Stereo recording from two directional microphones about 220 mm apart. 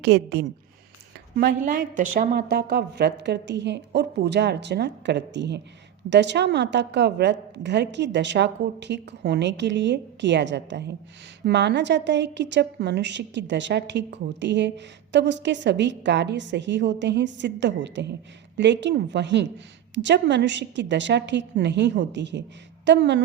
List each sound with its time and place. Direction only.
0.0 s a woman's voice: 50° right (ahead or behind)